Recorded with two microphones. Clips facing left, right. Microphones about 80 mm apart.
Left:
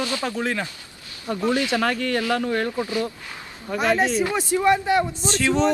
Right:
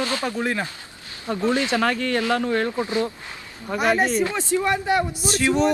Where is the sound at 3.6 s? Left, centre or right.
Right.